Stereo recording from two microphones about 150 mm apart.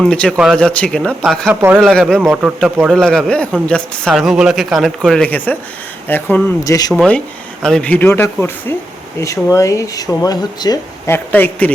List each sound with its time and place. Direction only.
0.0 s speech: 5° left (ahead or behind)
1.6 s speech: 10° right (ahead or behind)
1.9 s speech: 5° left (ahead or behind); by 11.1 s 25° left (ahead or behind)
11.1 s speech: 10° left (ahead or behind)